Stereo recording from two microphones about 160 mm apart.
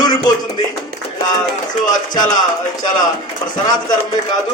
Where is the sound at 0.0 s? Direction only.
25° left (ahead or behind).